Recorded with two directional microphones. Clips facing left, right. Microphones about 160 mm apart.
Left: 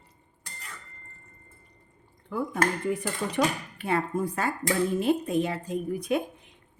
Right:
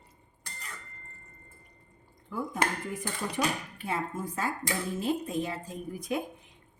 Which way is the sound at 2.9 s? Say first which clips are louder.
Left 6 dB; 65° left (ahead or behind).